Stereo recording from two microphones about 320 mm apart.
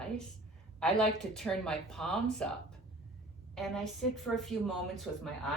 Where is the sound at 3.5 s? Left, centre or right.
Centre.